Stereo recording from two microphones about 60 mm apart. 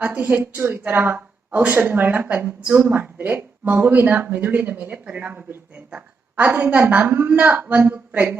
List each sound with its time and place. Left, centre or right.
0.0 s a woman's voice: right